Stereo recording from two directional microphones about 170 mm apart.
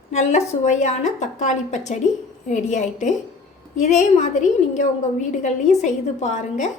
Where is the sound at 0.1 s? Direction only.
45° left (ahead or behind).